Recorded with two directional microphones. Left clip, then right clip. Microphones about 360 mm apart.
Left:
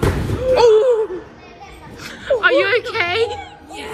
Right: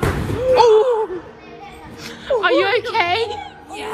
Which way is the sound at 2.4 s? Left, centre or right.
Centre.